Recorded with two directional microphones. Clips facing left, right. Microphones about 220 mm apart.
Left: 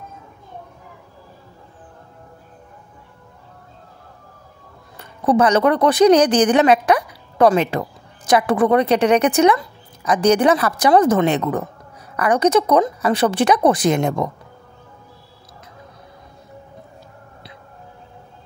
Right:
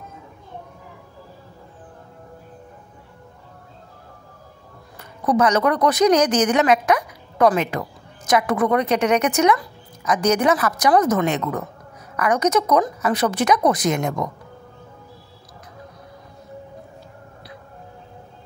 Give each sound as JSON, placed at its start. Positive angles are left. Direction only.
{"t": 4.9, "sound": "speech", "side_deg": 30}